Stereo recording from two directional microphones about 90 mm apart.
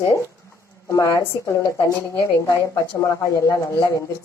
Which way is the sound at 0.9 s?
40° left (ahead or behind).